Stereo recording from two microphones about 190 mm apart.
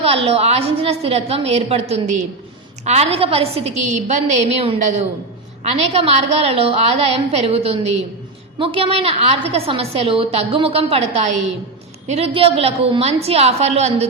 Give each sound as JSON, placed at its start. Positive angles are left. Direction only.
{"t": 0.0, "sound": "a woman's voice", "side_deg": -30}